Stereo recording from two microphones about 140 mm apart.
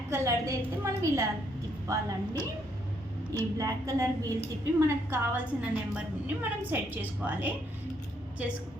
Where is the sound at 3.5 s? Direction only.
25° right (ahead or behind).